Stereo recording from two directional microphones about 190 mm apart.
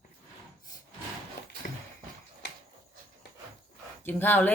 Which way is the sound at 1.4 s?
55° left (ahead or behind).